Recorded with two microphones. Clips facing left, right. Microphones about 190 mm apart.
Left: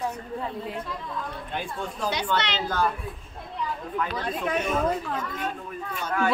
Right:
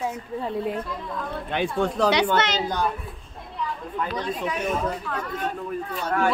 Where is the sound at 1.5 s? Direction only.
75° right (ahead or behind).